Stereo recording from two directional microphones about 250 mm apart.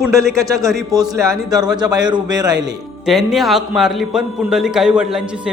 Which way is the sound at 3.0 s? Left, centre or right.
Centre.